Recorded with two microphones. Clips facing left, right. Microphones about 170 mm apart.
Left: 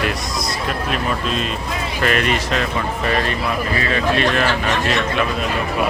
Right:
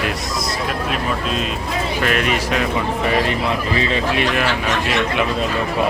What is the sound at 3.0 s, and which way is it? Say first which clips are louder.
A man's voice: right 1 dB; 15° right (ahead or behind).